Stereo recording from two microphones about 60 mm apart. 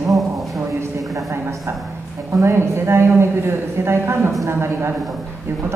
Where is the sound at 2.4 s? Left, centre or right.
Right.